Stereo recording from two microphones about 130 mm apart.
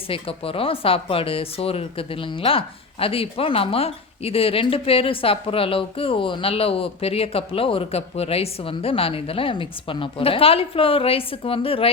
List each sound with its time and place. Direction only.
0.1 s speech: 45° left (ahead or behind)